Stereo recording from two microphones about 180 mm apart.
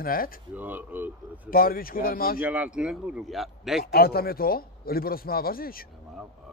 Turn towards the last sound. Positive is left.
turn(degrees=55)  # may be behind; listen again after turning